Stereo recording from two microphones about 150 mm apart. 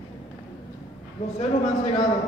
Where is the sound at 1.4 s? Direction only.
40° left (ahead or behind).